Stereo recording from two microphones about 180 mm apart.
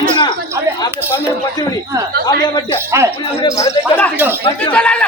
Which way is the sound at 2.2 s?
25° left (ahead or behind).